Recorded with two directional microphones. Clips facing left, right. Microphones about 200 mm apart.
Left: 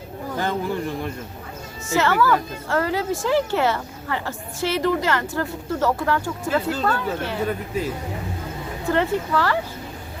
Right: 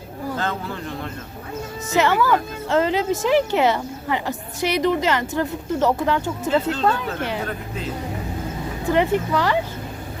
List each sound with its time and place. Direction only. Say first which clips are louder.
0.3 s speech: left 6 dB; 15° left (ahead or behind)
1.9 s a woman's voice: right 1 dB; 20° right (ahead or behind)
8.9 s speech: right 2 dB; 15° right (ahead or behind)